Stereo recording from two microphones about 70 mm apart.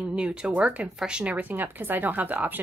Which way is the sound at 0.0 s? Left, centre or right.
Centre.